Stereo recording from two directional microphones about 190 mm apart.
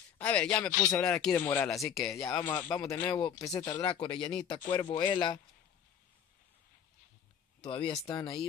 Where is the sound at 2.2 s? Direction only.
15° left (ahead or behind).